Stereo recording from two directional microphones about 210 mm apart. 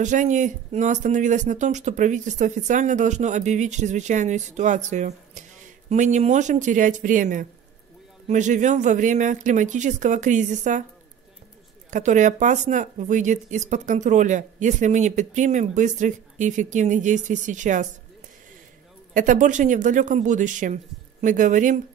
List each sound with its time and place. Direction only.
0.0 s speech: 35° right (ahead or behind)
11.9 s speech: 35° right (ahead or behind)
19.1 s speech: 35° right (ahead or behind)